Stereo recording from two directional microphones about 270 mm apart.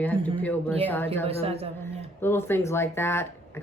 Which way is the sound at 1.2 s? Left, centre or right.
Right.